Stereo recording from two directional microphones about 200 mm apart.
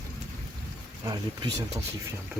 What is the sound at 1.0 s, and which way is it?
Speech, 20° right (ahead or behind).